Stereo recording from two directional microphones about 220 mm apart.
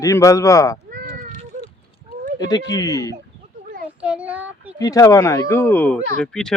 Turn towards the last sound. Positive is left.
turn(degrees=5)  # may be behind; listen again after turning